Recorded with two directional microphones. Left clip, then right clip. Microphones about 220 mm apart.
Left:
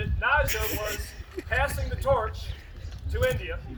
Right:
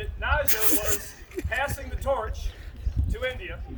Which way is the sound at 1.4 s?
10° right (ahead or behind).